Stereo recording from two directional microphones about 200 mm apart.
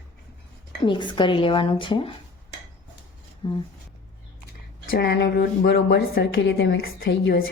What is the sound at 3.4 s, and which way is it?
Speech, 25° left (ahead or behind).